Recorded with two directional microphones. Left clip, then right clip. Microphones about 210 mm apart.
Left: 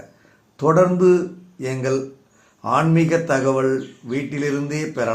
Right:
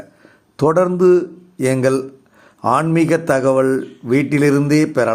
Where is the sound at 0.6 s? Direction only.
40° right (ahead or behind).